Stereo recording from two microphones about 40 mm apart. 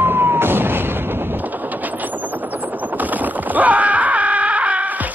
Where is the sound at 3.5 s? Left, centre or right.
Right.